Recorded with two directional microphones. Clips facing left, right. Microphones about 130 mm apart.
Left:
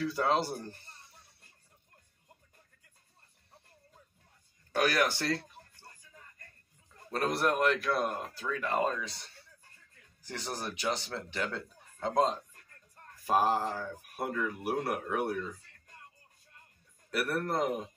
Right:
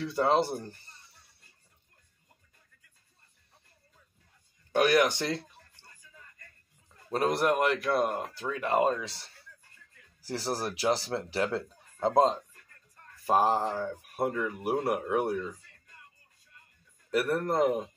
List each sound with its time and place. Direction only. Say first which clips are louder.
0.0 s mantra: right 3 dB; 30° right (ahead or behind)
4.8 s mantra: right 4 dB; 20° right (ahead or behind)
7.3 s mantra: even; 20° right (ahead or behind)
10.2 s speech: right 6 dB; 35° right (ahead or behind)
13.3 s mantra: right 3 dB; 25° right (ahead or behind)
14.3 s speech: right 3 dB; 20° right (ahead or behind)
17.3 s mantra: right 4 dB; 25° right (ahead or behind)